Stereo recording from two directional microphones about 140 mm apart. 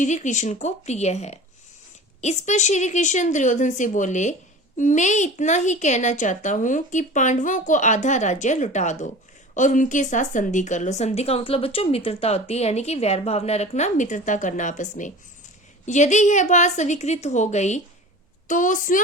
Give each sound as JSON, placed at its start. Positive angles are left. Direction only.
{"t": 0.0, "sound": "a woman's voice", "side_deg": 60}
{"t": 18.4, "sound": "a woman's voice", "side_deg": 70}